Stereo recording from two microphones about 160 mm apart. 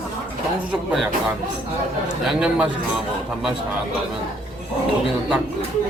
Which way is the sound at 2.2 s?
5° right (ahead or behind).